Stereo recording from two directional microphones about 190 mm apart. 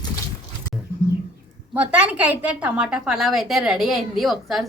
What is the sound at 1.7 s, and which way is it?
A woman's voice, 5° right (ahead or behind).